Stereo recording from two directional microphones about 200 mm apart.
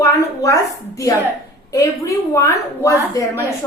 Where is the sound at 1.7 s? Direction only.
15° left (ahead or behind).